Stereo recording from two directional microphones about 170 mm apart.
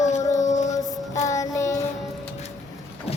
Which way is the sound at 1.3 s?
20° left (ahead or behind).